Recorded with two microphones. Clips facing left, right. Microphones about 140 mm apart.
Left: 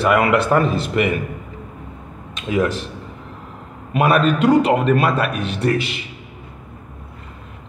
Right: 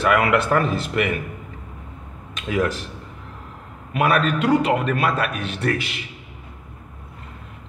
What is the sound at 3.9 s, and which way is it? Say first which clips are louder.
A man's voice: left 4 dB; 35° left (ahead or behind).